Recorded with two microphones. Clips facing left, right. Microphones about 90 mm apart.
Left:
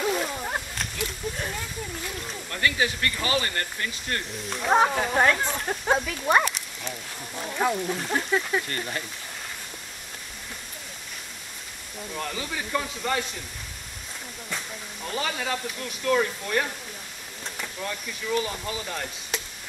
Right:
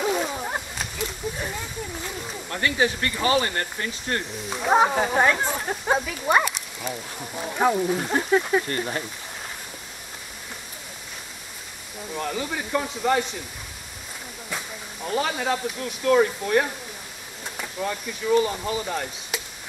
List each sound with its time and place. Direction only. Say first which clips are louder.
0.0 s a sound: right 2 dB; 5° right (ahead or behind)
2.5 s speech: right 2 dB; 15° right (ahead or behind)
4.5 s speech: right 2 dB; 5° right (ahead or behind)
7.2 s speech: right 2 dB; 15° right (ahead or behind)
12.1 s speech: right 4 dB; 5° right (ahead or behind)
15.0 s speech: right 5 dB; 5° right (ahead or behind)